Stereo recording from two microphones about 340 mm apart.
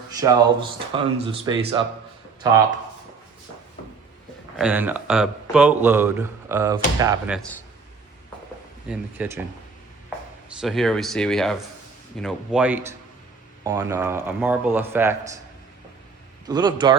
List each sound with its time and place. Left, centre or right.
0.1 s speech: centre
4.5 s a man's voice: centre
8.9 s a man's voice: centre
10.6 s a man's voice: centre
16.5 s speech: centre